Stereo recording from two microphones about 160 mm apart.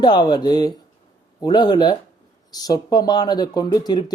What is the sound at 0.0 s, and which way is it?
Speech, 25° left (ahead or behind).